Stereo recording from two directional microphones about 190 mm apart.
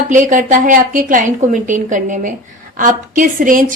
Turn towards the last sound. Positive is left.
turn(degrees=-45)  # may be behind; listen again after turning